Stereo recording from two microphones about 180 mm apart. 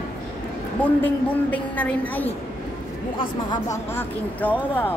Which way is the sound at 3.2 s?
25° left (ahead or behind).